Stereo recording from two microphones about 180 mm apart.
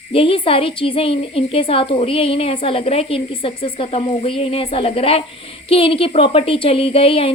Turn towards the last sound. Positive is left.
turn(degrees=30)  # may be behind; listen again after turning